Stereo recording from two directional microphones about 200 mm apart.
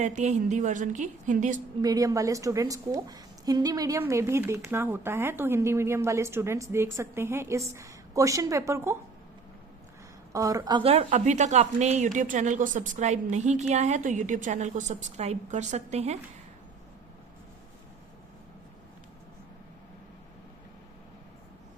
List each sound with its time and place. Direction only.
0.0 s speech: 35° right (ahead or behind)
1.8 s a woman's voice: 20° right (ahead or behind)
10.3 s speech: 15° right (ahead or behind); by 16.1 s 35° right (ahead or behind)